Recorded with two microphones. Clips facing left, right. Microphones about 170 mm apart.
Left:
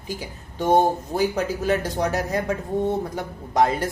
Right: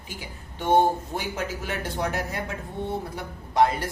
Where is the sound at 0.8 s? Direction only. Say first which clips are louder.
Left 3 dB; 40° left (ahead or behind).